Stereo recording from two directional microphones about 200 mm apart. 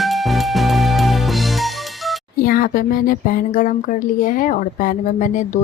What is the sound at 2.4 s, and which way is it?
Speech, 45° left (ahead or behind).